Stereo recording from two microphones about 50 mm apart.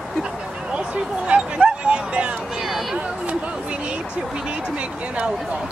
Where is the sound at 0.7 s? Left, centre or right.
Right.